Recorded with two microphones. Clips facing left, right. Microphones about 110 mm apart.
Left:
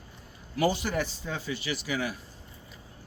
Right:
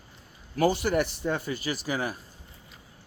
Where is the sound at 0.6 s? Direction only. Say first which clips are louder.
Right 3 dB; 55° right (ahead or behind); by 2.1 s 40° right (ahead or behind).